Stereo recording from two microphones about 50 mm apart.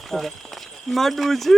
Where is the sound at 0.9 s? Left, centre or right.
Centre.